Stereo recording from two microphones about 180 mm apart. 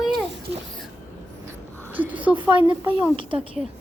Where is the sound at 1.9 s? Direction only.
10° right (ahead or behind).